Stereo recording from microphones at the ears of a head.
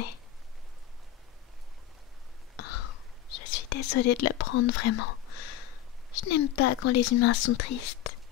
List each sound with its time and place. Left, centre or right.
2.5 s whispering: left